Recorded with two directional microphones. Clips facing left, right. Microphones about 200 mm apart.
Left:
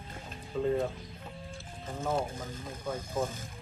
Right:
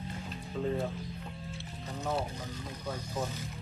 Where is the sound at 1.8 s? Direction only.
50° left (ahead or behind).